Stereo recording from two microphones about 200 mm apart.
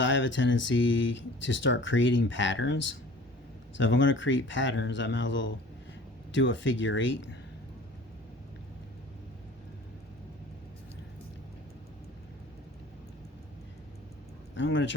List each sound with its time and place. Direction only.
0.0 s speech: 65° left (ahead or behind)
14.5 s speech: 65° left (ahead or behind)